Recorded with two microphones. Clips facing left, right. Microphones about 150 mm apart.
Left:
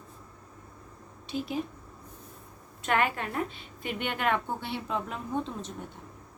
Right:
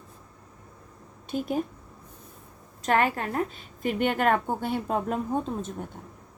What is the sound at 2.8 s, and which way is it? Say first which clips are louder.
A woman's voice: right 4 dB; 40° right (ahead or behind).